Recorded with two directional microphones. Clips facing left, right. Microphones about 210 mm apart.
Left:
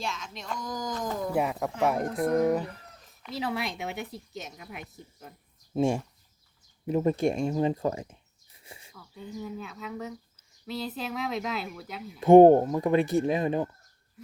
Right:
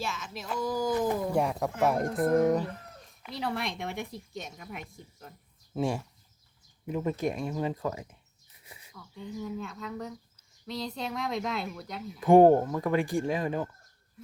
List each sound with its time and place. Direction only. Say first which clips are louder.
0.0 s speech: even; 5° right (ahead or behind)
1.3 s speech: even; 5° left (ahead or behind)
5.7 s speech: left 4 dB; 25° left (ahead or behind)
6.8 s speech: left 5 dB; 35° left (ahead or behind)
8.6 s a sound: left 4 dB; 30° left (ahead or behind)
9.1 s speech: right 1 dB; 5° left (ahead or behind)
12.2 s speech: left 4 dB; 20° left (ahead or behind)